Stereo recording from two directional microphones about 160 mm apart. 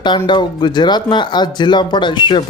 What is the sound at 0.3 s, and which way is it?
Speech, 30° left (ahead or behind).